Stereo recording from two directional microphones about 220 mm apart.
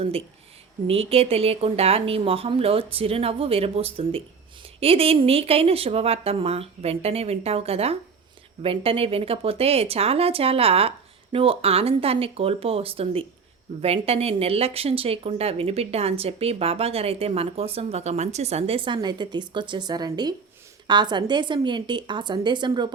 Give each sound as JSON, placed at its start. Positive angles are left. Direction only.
{"t": 0.9, "sound": "a woman's voice", "side_deg": -25}